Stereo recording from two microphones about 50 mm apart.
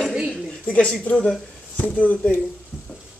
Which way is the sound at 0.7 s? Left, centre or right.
Centre.